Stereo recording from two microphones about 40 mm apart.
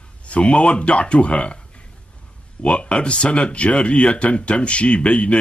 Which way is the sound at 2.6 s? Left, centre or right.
Left.